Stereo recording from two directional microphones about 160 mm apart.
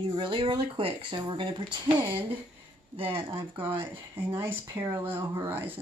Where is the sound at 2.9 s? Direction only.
35° right (ahead or behind).